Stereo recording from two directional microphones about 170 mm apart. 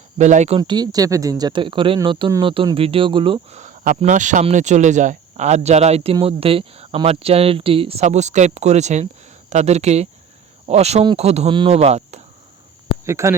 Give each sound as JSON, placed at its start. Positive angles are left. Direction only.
{"t": 0.2, "sound": "speech", "side_deg": -45}
{"t": 0.6, "sound": "speech", "side_deg": -25}
{"t": 3.6, "sound": "speech", "side_deg": -45}
{"t": 13.1, "sound": "speech", "side_deg": -15}